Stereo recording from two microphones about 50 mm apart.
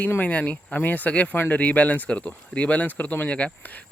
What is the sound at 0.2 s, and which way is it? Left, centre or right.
Speech, left.